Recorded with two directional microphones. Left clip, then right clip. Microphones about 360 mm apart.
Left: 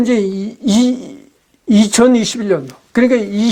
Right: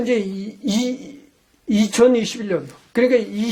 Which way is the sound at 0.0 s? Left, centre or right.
Left.